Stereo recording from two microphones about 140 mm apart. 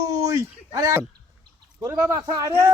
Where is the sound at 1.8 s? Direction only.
25° right (ahead or behind).